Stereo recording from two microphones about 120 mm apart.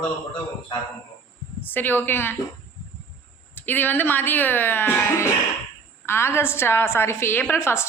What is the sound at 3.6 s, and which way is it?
A woman's voice, 15° left (ahead or behind).